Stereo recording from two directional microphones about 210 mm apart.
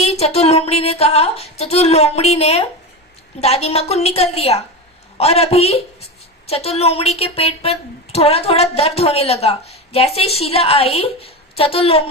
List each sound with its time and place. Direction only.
0.0 s a woman's voice: 30° left (ahead or behind)